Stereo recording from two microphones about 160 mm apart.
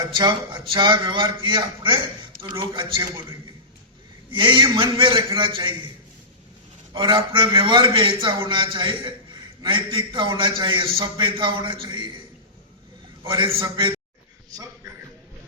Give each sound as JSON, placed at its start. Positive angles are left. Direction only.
{"t": 0.0, "sound": "a man's voice", "side_deg": -25}
{"t": 4.4, "sound": "a man's voice", "side_deg": -30}
{"t": 6.9, "sound": "a man's voice", "side_deg": -30}
{"t": 13.2, "sound": "a man's voice", "side_deg": -30}